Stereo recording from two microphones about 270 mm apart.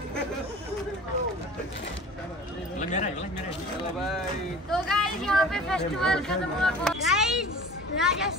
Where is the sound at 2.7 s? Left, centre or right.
Left.